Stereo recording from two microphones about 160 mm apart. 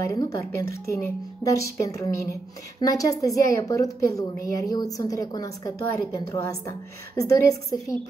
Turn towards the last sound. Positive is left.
turn(degrees=20)  # may be behind; listen again after turning